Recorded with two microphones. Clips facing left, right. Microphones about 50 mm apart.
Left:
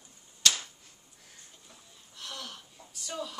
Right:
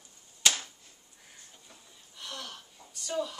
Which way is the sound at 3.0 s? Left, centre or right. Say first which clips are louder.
Right 5 dB; centre.